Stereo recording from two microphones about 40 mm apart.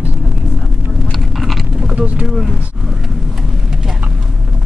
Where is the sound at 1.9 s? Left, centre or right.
Right.